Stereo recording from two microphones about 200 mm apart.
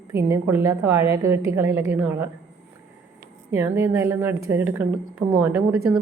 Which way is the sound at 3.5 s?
15° right (ahead or behind).